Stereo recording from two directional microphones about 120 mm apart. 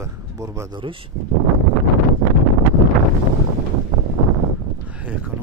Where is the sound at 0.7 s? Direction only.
45° right (ahead or behind).